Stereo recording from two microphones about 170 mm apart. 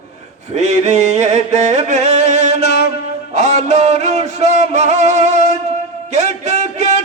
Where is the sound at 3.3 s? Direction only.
40° right (ahead or behind).